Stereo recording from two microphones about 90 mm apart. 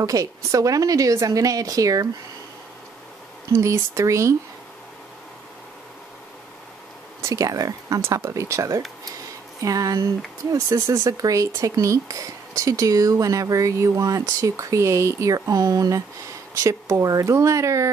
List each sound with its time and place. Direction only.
0.0 s speech: 40° right (ahead or behind)
3.5 s speech: 30° right (ahead or behind)
7.2 s speech: 40° right (ahead or behind)